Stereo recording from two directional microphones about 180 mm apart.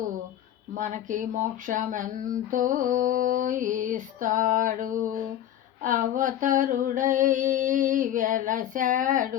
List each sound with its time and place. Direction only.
0.7 s speech: 45° right (ahead or behind)